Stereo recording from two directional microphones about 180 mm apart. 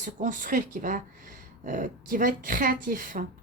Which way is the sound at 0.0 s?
45° right (ahead or behind).